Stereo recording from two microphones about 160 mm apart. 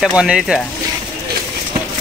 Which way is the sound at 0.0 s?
5° right (ahead or behind).